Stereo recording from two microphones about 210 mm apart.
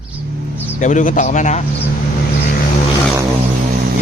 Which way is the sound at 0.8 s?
35° left (ahead or behind).